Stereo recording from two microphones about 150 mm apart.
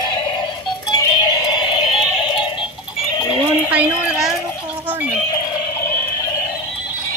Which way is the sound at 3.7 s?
5° right (ahead or behind).